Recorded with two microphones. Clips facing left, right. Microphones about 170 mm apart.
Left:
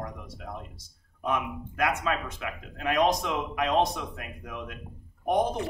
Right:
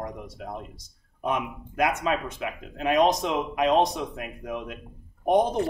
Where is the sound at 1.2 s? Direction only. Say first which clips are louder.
Right 1 dB; 20° right (ahead or behind).